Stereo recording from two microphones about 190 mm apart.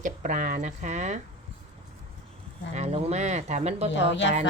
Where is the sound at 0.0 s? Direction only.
45° right (ahead or behind).